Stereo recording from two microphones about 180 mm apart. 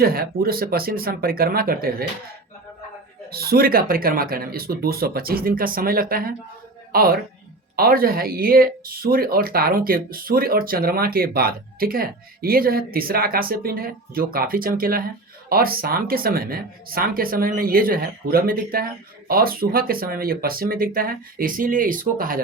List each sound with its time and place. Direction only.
0.0 s speech: 55° right (ahead or behind)
3.2 s speech: 60° right (ahead or behind)